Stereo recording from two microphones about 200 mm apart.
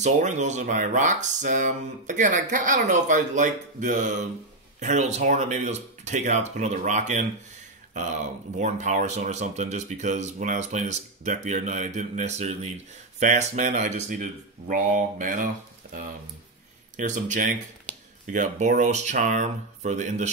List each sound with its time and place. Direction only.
0.0 s speech: 35° right (ahead or behind)
8.5 s speech: 35° right (ahead or behind)
15.8 s a sound: 45° right (ahead or behind)
16.9 s speech: 40° right (ahead or behind)